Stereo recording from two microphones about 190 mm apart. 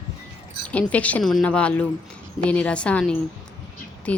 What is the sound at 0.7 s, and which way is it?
Speech, 5° left (ahead or behind).